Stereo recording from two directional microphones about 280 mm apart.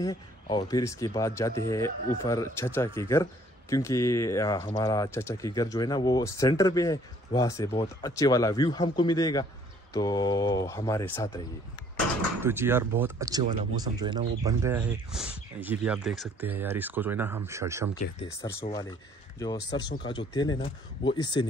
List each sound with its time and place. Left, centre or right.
0.0 s speech: centre
12.4 s speech: centre
18.2 s a man's voice: centre